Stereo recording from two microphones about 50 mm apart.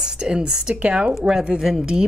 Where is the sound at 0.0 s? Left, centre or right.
Centre.